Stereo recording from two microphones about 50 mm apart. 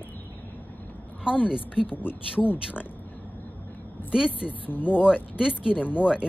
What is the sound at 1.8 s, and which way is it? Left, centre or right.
Speech, left.